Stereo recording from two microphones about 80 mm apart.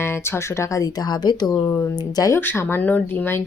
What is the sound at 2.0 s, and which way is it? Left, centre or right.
Speech, left.